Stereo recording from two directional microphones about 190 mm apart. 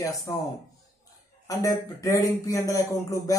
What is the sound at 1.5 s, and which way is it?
Speech, 15° left (ahead or behind).